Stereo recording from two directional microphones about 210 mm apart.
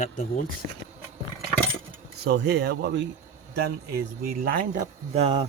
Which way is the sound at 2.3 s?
50° right (ahead or behind).